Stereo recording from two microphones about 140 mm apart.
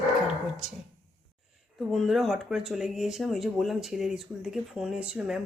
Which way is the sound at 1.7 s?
Centre (ahead or behind).